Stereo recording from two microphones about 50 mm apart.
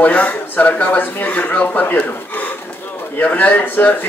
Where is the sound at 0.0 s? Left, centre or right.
Left.